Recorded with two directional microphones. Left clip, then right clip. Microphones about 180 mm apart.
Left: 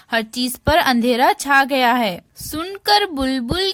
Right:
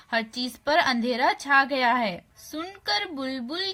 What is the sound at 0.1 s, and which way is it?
A woman's voice, 50° left (ahead or behind).